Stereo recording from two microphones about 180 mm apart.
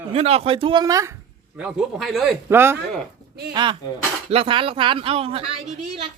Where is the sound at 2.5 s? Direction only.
10° right (ahead or behind).